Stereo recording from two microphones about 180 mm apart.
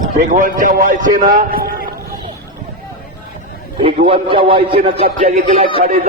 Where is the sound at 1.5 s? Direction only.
55° right (ahead or behind).